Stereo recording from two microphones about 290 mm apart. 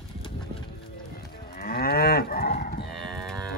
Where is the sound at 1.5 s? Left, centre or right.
Left.